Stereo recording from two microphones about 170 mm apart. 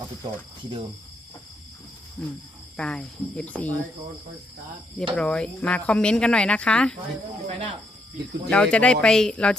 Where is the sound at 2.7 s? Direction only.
5° left (ahead or behind).